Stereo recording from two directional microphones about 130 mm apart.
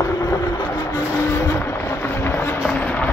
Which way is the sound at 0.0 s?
25° left (ahead or behind).